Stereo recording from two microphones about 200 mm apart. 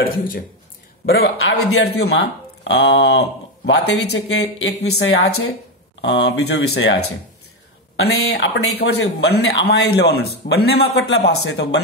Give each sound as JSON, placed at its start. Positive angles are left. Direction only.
{"t": 1.2, "sound": "speech", "side_deg": 80}
{"t": 4.8, "sound": "speech", "side_deg": 55}
{"t": 7.9, "sound": "speech", "side_deg": 90}
{"t": 8.7, "sound": "speech", "side_deg": 55}